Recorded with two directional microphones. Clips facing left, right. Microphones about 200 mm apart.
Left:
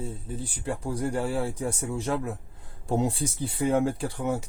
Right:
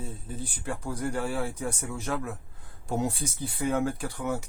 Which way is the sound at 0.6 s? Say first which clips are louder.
Left 3 dB; 25° left (ahead or behind).